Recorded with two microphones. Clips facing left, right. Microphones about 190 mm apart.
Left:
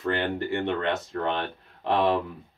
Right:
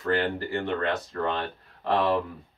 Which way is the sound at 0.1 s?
25° left (ahead or behind).